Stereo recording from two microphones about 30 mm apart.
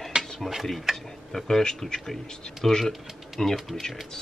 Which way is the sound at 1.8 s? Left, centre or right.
Centre.